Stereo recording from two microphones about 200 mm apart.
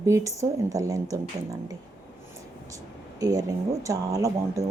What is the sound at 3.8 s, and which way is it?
Speech, 15° right (ahead or behind).